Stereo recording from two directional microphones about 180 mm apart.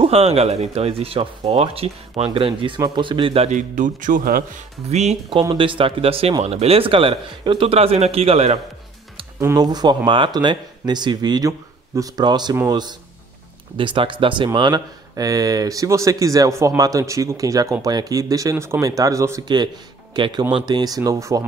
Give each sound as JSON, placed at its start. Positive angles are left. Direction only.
{"t": 0.0, "sound": "speech", "side_deg": -35}
{"t": 4.8, "sound": "speech", "side_deg": -35}
{"t": 5.4, "sound": "speech", "side_deg": -25}
{"t": 9.4, "sound": "speech", "side_deg": -20}